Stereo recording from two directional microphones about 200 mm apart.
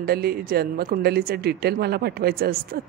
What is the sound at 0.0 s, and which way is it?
A woman's voice, 50° right (ahead or behind).